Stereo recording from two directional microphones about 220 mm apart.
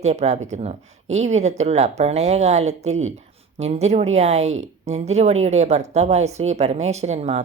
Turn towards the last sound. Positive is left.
turn(degrees=-30)  # may be behind; listen again after turning